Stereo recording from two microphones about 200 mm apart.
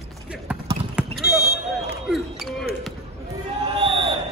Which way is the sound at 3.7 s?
25° right (ahead or behind).